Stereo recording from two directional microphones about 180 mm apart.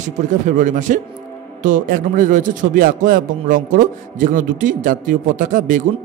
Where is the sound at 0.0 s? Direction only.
45° right (ahead or behind).